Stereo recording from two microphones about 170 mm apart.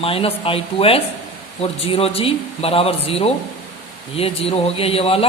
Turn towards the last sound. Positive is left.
turn(degrees=35)  # may be behind; listen again after turning